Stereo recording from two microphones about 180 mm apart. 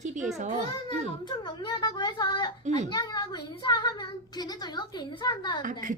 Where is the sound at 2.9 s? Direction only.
20° left (ahead or behind).